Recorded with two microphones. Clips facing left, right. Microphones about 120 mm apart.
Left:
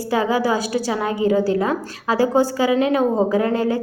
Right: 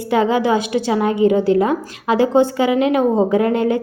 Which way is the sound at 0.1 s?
25° right (ahead or behind).